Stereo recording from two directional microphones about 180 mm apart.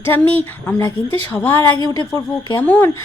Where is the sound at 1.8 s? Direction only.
20° left (ahead or behind).